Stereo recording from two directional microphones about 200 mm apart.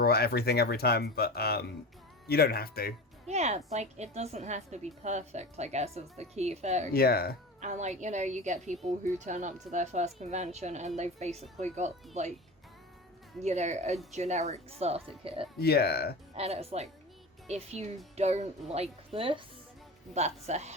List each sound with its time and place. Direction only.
0.0 s speech: 50° left (ahead or behind)
3.2 s a woman's voice: 35° right (ahead or behind)
6.9 s speech: 50° left (ahead or behind)
7.6 s a woman's voice: 35° right (ahead or behind)
13.4 s a woman's voice: 35° right (ahead or behind)
15.5 s speech: 55° left (ahead or behind)
16.3 s a woman's voice: 30° right (ahead or behind)